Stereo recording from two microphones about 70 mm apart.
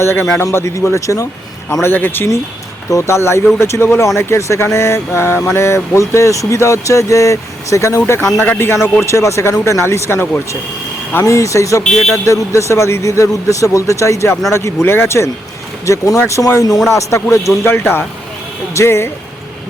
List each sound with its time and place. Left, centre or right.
0.0 s a man's voice: left
1.8 s speech: left
2.9 s a man's voice: left
11.8 s speech: centre
12.2 s a man's voice: left